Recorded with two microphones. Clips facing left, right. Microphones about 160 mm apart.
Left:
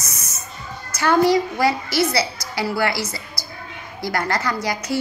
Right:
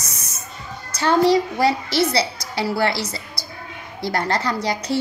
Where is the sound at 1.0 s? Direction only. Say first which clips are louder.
Even; 30° right (ahead or behind).